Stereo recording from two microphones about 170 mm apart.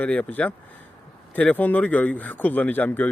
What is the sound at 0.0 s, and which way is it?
Speech, 10° left (ahead or behind).